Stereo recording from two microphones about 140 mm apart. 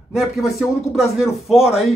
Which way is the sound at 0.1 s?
Centre (ahead or behind).